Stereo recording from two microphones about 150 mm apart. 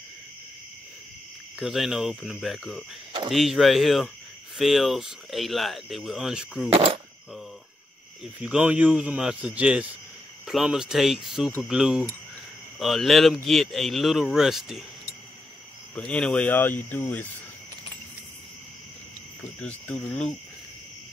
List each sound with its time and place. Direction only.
1.6 s speech: centre (ahead or behind)
6.7 s speech: 40° right (ahead or behind)
8.4 s speech: 10° right (ahead or behind)
15.9 s speech: 5° left (ahead or behind)
19.6 s speech: 10° left (ahead or behind)